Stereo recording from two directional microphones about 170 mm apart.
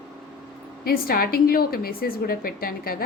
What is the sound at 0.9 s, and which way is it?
A woman's voice, 60° left (ahead or behind).